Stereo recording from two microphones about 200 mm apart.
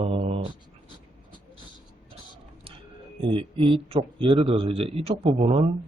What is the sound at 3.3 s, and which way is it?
Speech, 25° right (ahead or behind).